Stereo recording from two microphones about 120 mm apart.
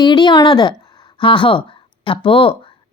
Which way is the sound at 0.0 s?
40° left (ahead or behind).